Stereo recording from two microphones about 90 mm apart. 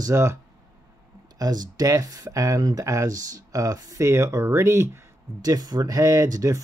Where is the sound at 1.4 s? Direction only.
45° right (ahead or behind); by 4.8 s 30° right (ahead or behind).